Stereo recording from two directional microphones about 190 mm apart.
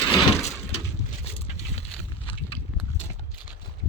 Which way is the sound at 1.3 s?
30° left (ahead or behind).